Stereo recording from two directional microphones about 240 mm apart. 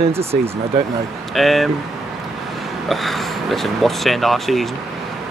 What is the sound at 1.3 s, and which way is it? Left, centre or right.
Speech, centre.